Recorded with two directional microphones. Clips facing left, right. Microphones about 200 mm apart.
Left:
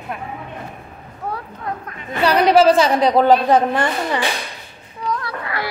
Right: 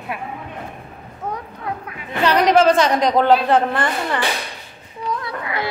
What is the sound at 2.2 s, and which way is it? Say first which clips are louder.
A woman's voice: left 1 dB; 10° left (ahead or behind).